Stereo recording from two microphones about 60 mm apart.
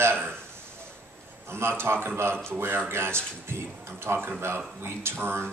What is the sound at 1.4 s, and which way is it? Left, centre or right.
A man's voice, right.